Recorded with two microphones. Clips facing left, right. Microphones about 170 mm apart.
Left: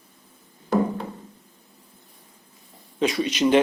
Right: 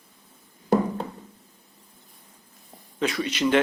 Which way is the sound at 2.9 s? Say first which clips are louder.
Left 3 dB; 20° left (ahead or behind).